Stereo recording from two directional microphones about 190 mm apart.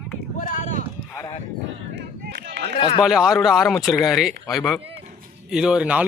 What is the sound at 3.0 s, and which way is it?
A man's voice, 5° right (ahead or behind).